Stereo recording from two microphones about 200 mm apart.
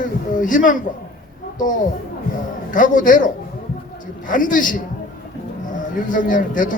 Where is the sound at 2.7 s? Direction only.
40° left (ahead or behind).